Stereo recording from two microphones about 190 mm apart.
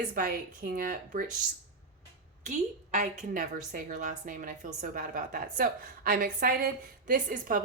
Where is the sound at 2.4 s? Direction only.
40° right (ahead or behind).